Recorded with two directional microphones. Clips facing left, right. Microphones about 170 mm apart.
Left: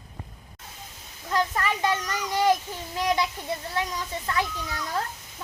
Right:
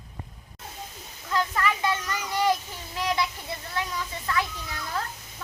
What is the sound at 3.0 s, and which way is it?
Speech, 20° left (ahead or behind).